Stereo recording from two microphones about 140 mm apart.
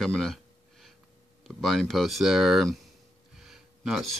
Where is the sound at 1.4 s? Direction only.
Centre (ahead or behind).